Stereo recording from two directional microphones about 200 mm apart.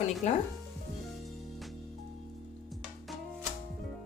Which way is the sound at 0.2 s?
35° left (ahead or behind).